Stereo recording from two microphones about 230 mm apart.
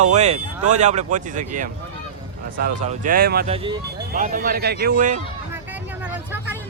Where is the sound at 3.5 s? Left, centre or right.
Right.